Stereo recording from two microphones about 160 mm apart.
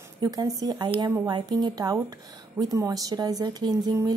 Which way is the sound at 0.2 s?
25° right (ahead or behind).